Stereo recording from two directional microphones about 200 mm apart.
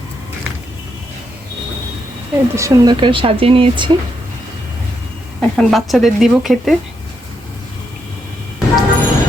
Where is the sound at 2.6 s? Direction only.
20° right (ahead or behind).